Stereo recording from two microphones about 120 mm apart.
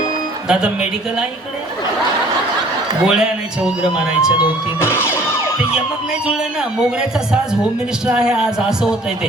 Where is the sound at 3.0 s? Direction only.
5° right (ahead or behind).